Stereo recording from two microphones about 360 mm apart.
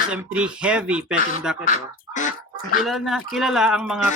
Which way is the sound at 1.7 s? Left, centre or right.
Left.